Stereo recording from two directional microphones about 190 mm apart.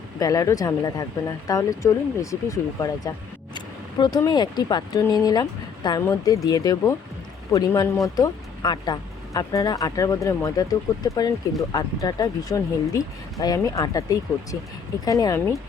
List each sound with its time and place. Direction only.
0.2 s speech: 20° left (ahead or behind)